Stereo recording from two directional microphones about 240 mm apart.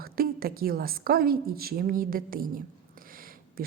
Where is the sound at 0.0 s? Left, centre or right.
Right.